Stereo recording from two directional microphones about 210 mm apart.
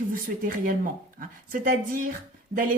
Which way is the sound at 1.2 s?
40° right (ahead or behind).